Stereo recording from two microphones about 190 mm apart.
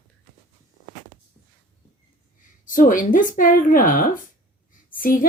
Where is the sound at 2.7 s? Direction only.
45° left (ahead or behind).